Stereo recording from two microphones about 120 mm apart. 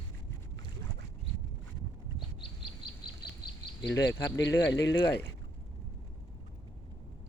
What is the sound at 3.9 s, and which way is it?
Speech, 20° left (ahead or behind).